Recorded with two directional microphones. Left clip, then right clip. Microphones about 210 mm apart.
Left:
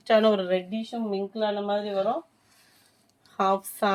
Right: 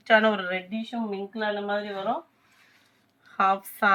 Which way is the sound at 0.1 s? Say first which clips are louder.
Even; 50° left (ahead or behind).